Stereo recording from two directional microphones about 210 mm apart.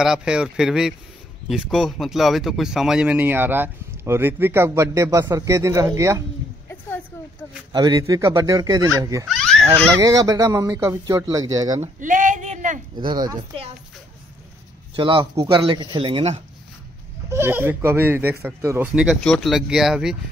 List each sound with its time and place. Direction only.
0.0 s a man's voice: 5° right (ahead or behind)
6.7 s a sound: 10° left (ahead or behind)
7.7 s speech: 20° right (ahead or behind)
9.3 s a sound: centre (ahead or behind)
9.9 s speech: 15° right (ahead or behind)
11.8 s a sound: 40° right (ahead or behind)
13.0 s speech: 20° right (ahead or behind)
15.0 s speech: 25° right (ahead or behind)
17.3 s speech: 10° right (ahead or behind)